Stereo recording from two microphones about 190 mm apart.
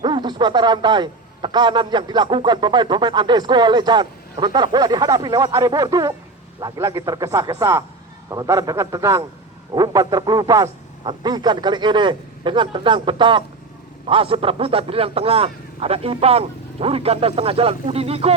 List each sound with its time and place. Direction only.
0.0 s a man's voice: 25° right (ahead or behind)